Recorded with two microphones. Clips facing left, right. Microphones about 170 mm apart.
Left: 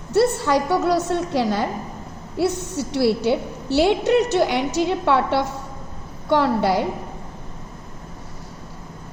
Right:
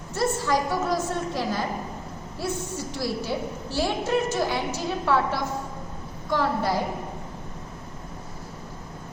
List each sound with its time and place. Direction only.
0.1 s a woman's voice: 70° left (ahead or behind)